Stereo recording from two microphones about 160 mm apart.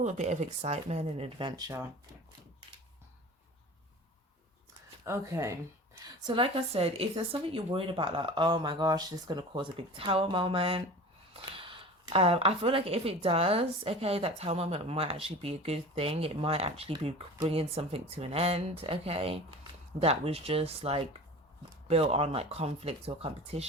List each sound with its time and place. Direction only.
0.0 s speech: 45° right (ahead or behind); by 1.8 s 25° right (ahead or behind)
5.0 s speech: 20° right (ahead or behind); by 23.6 s 40° right (ahead or behind)